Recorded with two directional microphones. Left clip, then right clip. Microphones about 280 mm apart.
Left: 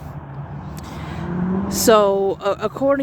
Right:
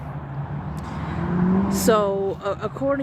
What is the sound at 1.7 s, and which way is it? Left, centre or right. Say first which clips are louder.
Speech: left 7 dB; left.